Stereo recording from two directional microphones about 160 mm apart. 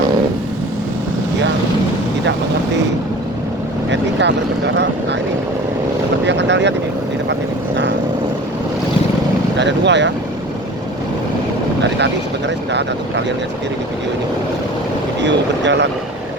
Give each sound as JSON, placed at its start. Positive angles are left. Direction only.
{"t": 3.9, "sound": "speech", "side_deg": -90}
{"t": 6.2, "sound": "vehicle", "side_deg": -90}
{"t": 9.6, "sound": "vehicle", "side_deg": -90}
{"t": 15.2, "sound": "speech", "side_deg": -90}